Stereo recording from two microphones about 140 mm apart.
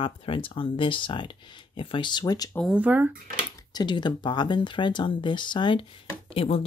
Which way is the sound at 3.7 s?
30° left (ahead or behind).